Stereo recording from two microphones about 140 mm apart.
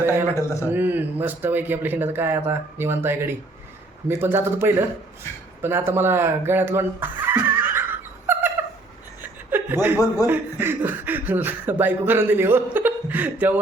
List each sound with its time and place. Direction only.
0.0 s speech: 15° right (ahead or behind)
8.3 s a sound: 15° right (ahead or behind)
9.2 s chuckle: 15° right (ahead or behind)
10.2 s speech: 15° right (ahead or behind)